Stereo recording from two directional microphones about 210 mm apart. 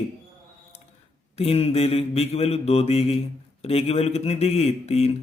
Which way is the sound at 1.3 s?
30° left (ahead or behind).